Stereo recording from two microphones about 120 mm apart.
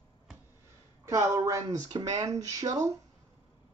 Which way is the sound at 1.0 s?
25° right (ahead or behind).